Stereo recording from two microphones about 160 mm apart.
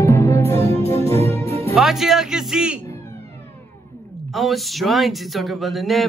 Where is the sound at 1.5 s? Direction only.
40° right (ahead or behind).